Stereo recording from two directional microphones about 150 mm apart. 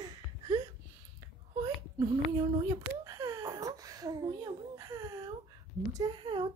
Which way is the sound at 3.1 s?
25° right (ahead or behind).